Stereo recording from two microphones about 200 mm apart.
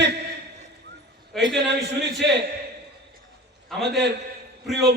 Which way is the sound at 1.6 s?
60° right (ahead or behind).